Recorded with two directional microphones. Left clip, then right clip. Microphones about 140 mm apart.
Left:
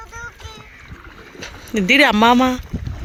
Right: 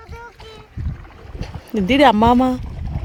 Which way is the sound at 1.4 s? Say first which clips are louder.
Left 1 dB; 25° right (ahead or behind).